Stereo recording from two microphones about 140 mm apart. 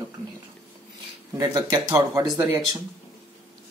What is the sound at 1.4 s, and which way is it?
Speech, 25° right (ahead or behind).